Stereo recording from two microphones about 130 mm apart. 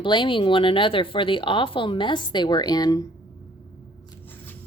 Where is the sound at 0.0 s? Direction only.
35° left (ahead or behind).